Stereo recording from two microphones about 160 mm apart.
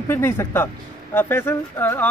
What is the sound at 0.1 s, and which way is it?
Speech, 15° left (ahead or behind).